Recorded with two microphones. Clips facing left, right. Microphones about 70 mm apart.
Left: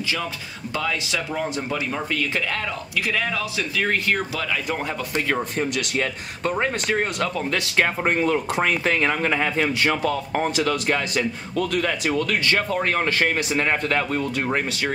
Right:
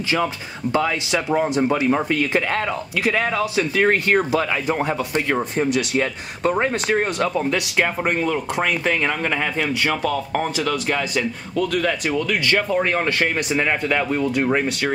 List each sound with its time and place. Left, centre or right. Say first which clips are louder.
0.7 s speech: right 5 dB; right
4.8 s speech: right 3 dB; centre
7.7 s speech: left 3 dB; centre
14.4 s speech: right 4 dB; centre